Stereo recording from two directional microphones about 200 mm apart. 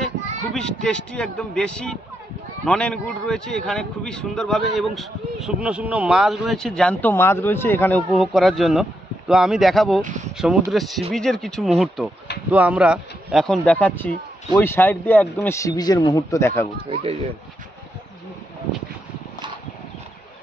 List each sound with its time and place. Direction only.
0.5 s speech: 5° left (ahead or behind)
8.1 s speech: centre (ahead or behind)
10.0 s speech: 35° right (ahead or behind)
10.3 s speech: 5° right (ahead or behind); by 16.6 s 15° left (ahead or behind)
16.9 s speech: 30° right (ahead or behind)